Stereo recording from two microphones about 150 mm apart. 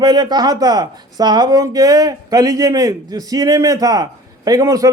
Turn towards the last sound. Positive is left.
turn(degrees=-25)  # may be behind; listen again after turning